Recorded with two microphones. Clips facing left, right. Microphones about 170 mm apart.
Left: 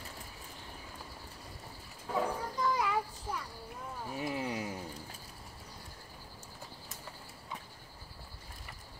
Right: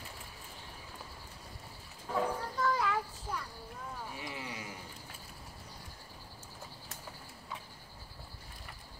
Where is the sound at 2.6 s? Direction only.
15° left (ahead or behind).